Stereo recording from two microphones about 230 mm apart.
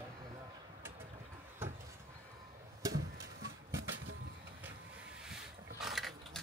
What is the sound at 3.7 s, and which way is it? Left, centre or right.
Vehicle, right.